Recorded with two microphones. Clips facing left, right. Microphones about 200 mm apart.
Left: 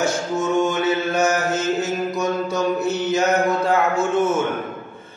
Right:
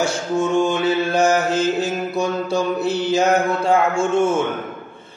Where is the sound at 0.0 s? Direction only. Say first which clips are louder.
Right 1 dB; 30° right (ahead or behind).